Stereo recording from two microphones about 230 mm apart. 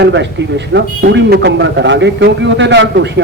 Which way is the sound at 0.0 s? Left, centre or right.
Right.